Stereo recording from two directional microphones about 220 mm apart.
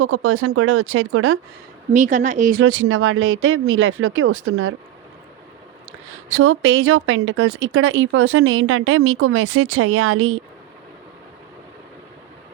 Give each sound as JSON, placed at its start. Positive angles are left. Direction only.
{"t": 0.0, "sound": "speech", "side_deg": -75}
{"t": 1.9, "sound": "a woman's voice", "side_deg": -35}
{"t": 2.6, "sound": "speech", "side_deg": -65}
{"t": 6.3, "sound": "speech", "side_deg": -65}